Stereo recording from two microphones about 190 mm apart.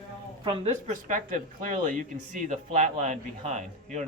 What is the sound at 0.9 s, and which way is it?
Speech, 45° right (ahead or behind).